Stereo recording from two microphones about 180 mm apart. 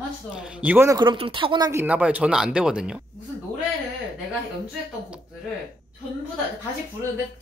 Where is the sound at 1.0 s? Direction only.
25° right (ahead or behind).